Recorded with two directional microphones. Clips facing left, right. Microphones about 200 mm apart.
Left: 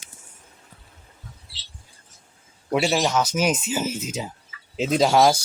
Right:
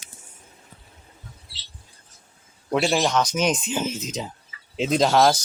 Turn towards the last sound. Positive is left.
turn(degrees=10)  # may be behind; listen again after turning